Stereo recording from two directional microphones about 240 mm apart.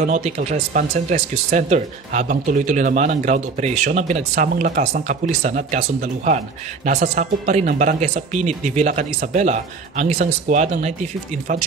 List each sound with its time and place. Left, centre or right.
0.0 s speech: right